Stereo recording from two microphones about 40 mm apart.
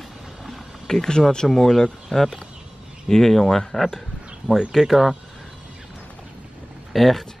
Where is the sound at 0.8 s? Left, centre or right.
Centre.